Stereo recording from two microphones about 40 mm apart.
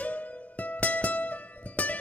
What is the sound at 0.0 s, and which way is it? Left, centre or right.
Music, left.